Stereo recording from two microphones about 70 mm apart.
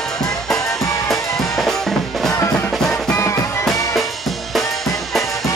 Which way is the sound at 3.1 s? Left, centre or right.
Left.